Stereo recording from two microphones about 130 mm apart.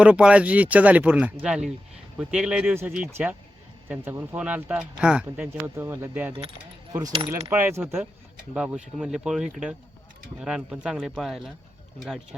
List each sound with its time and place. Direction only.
0.0 s speech: 10° right (ahead or behind)
7.5 s speech: 15° right (ahead or behind); by 12.2 s centre (ahead or behind)